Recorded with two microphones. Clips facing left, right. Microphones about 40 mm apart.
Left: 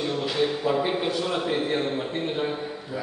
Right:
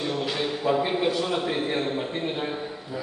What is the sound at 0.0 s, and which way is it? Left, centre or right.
A man's voice, centre.